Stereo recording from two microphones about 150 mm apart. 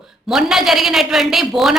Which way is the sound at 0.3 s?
5° right (ahead or behind).